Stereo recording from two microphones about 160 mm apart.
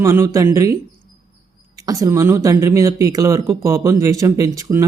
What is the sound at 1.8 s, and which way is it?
Speech, 20° right (ahead or behind).